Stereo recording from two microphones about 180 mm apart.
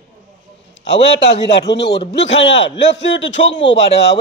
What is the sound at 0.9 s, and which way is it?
A man's voice, 75° left (ahead or behind).